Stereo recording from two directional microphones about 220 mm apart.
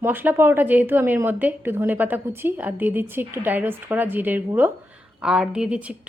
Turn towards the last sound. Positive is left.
turn(degrees=-5)  # may be behind; listen again after turning